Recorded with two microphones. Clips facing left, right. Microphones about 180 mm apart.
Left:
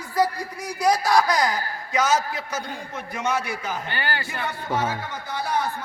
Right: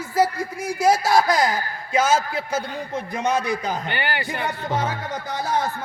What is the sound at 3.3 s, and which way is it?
Speech, 15° right (ahead or behind).